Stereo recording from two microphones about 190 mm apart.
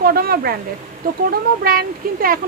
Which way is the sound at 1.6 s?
50° right (ahead or behind).